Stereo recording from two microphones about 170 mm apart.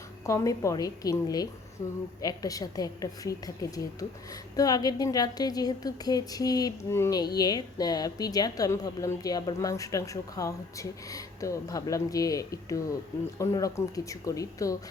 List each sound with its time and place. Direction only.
0.3 s a woman's voice: 20° left (ahead or behind)